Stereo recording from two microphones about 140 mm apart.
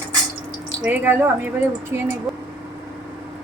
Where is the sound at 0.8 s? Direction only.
15° right (ahead or behind).